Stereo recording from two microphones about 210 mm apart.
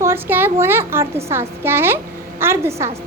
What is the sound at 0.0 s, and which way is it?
A woman's voice, 10° right (ahead or behind).